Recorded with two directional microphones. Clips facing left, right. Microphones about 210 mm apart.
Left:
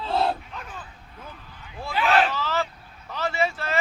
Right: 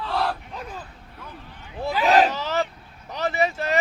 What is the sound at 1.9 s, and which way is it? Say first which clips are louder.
Speech: right 3 dB; 40° right (ahead or behind).